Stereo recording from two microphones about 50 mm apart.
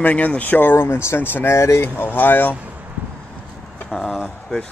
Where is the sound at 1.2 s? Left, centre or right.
Left.